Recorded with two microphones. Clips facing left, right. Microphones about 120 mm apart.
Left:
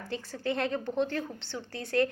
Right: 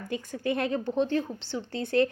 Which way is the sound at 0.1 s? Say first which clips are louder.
Right 3 dB; 20° right (ahead or behind).